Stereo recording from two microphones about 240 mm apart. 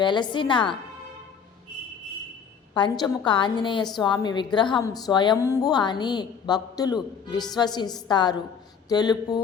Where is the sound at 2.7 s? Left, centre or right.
Centre.